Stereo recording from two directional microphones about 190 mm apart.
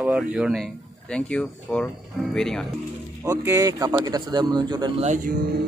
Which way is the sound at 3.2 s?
20° right (ahead or behind).